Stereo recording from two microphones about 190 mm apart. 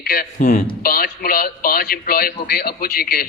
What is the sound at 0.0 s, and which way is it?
A man's voice, 50° left (ahead or behind).